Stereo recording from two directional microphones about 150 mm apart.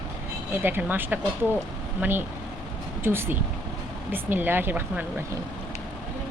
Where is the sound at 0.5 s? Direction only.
15° right (ahead or behind).